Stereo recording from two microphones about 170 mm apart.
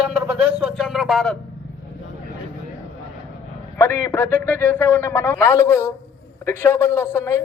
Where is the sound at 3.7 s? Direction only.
15° left (ahead or behind).